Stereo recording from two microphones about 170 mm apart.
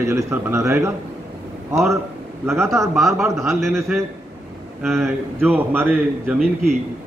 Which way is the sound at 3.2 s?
15° right (ahead or behind).